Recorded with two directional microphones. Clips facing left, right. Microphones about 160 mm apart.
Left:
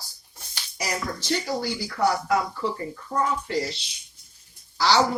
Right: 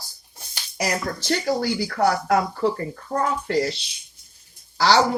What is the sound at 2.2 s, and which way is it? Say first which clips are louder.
Speech: right 4 dB; 55° right (ahead or behind).